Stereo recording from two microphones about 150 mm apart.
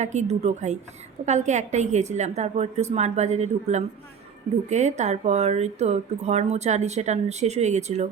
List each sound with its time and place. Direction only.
0.0 s speech: 50° right (ahead or behind)